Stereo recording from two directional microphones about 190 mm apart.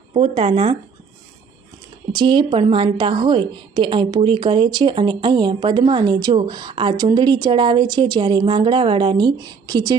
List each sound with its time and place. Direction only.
0.1 s a woman's voice: 30° right (ahead or behind)
2.1 s a woman's voice: 25° right (ahead or behind)